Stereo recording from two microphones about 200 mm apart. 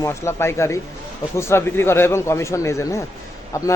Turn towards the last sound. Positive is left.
turn(degrees=15)  # may be behind; listen again after turning